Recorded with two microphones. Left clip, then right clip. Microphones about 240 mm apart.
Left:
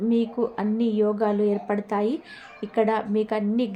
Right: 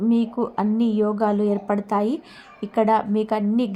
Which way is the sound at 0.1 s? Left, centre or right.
Centre.